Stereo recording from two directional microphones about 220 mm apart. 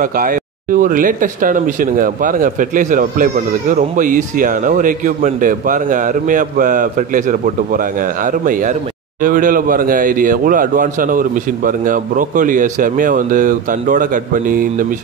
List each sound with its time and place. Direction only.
0.0 s speech: 40° right (ahead or behind)